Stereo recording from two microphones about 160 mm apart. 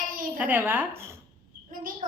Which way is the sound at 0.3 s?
10° right (ahead or behind).